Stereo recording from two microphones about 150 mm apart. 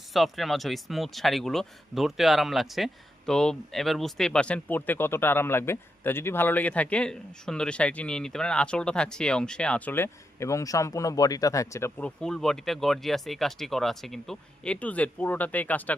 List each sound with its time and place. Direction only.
0.1 s speech: centre (ahead or behind)